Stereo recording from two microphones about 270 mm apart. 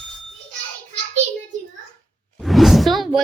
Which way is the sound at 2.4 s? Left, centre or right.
Centre.